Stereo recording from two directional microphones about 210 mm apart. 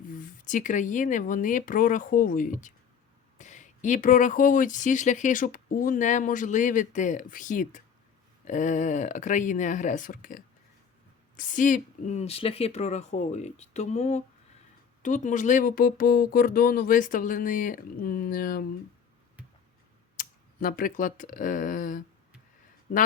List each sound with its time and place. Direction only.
0.1 s speech: 40° left (ahead or behind)
20.1 s speech: 40° left (ahead or behind)